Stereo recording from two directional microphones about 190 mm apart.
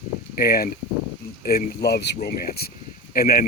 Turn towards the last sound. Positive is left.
turn(degrees=50)  # may be behind; listen again after turning